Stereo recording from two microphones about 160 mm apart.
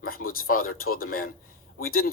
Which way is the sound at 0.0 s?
65° left (ahead or behind).